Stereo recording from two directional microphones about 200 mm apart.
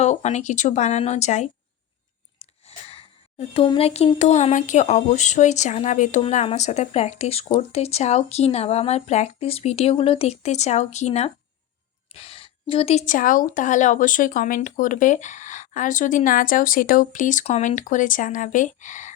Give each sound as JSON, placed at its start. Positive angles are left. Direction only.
{"t": 0.0, "sound": "speech", "side_deg": 35}